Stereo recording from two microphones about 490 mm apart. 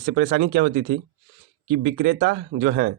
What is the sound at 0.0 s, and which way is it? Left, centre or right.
Speech, centre.